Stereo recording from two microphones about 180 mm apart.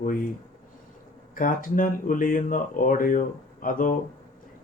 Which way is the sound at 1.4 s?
50° left (ahead or behind).